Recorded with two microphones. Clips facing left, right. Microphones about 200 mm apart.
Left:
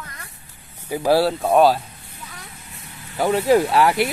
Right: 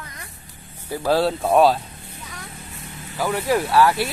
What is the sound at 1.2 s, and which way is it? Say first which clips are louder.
Speech: right 2 dB; centre (ahead or behind).